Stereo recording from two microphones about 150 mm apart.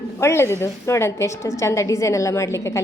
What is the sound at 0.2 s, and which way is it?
A woman's voice, 20° left (ahead or behind).